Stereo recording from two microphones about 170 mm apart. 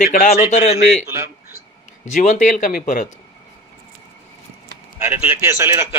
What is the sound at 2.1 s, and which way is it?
Speech, 50° left (ahead or behind).